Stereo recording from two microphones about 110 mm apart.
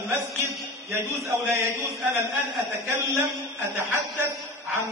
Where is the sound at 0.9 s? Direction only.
25° right (ahead or behind).